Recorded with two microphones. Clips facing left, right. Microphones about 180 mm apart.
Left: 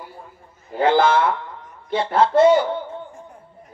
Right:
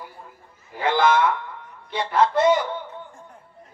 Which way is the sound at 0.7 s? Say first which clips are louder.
Left 3 dB; 30° left (ahead or behind).